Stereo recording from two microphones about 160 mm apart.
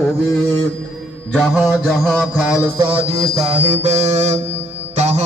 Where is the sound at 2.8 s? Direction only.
30° right (ahead or behind).